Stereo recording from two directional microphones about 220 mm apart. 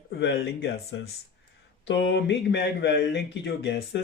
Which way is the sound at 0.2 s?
50° left (ahead or behind).